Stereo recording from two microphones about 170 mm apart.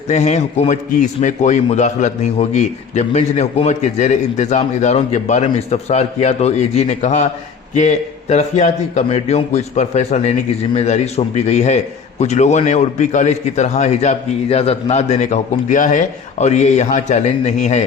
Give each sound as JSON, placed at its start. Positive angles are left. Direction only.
{"t": 0.1, "sound": "a man's voice", "side_deg": 40}